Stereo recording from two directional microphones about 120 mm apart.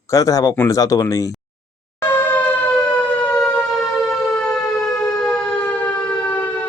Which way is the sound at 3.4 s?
Centre (ahead or behind).